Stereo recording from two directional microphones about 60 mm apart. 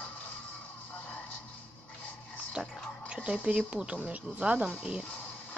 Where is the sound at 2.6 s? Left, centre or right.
Centre.